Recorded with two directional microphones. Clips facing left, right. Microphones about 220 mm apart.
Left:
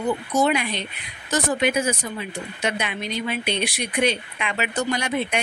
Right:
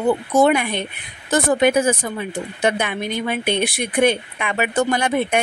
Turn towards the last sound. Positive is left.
turn(degrees=-50)  # may be behind; listen again after turning